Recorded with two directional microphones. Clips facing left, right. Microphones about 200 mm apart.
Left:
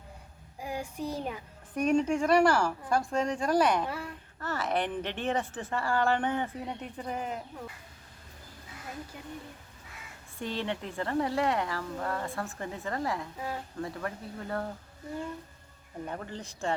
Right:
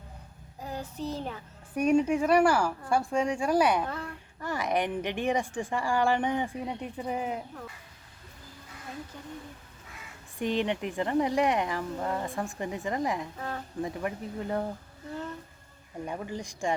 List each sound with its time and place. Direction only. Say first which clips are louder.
0.6 s child singing: even; 10° left (ahead or behind)
1.7 s a woman's voice: right 2 dB; 10° right (ahead or behind)
3.8 s a woman's voice: even; 10° left (ahead or behind)
4.4 s a woman's voice: right 2 dB; 15° right (ahead or behind)
10.3 s a woman's voice: right 5 dB; 15° right (ahead or behind)
16.0 s a woman's voice: right 4 dB; 10° right (ahead or behind)